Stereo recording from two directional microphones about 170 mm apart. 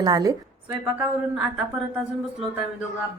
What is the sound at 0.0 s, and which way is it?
Speech, 20° right (ahead or behind).